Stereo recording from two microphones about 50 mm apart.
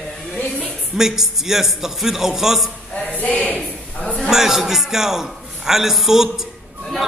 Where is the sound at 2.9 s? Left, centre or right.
Left.